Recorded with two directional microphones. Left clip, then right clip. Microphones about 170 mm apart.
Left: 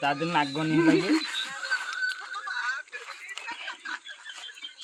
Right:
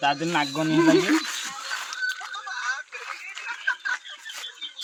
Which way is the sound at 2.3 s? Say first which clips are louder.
Right 1 dB; 15° left (ahead or behind).